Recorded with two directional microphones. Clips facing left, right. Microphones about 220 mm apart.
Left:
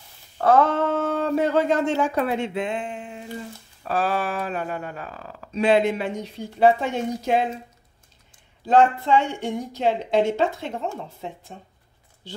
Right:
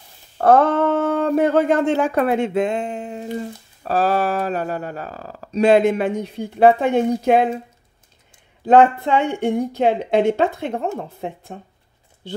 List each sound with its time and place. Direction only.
0.4 s speech: 55° right (ahead or behind)
8.6 s a woman's voice: 55° right (ahead or behind)